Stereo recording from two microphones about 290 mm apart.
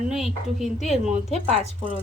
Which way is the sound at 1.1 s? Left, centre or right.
Right.